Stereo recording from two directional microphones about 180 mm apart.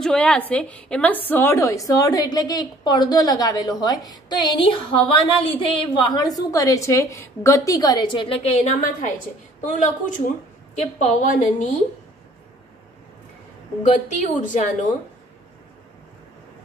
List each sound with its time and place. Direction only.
0.0 s a woman's voice: 5° left (ahead or behind); by 11.7 s 45° left (ahead or behind)
14.0 s a woman's voice: 45° left (ahead or behind)